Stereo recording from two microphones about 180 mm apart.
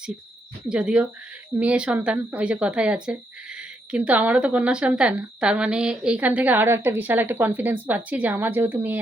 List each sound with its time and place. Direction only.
0.7 s speech: 5° right (ahead or behind)